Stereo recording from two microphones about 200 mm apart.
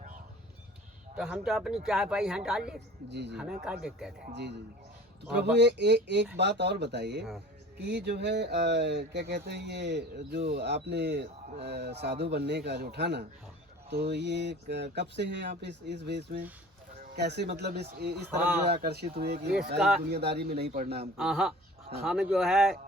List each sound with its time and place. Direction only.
1.1 s speech: 5° right (ahead or behind)
3.1 s speech: 55° right (ahead or behind)
3.6 s speech: centre (ahead or behind)
4.4 s speech: 60° right (ahead or behind)
21.2 s speech: centre (ahead or behind)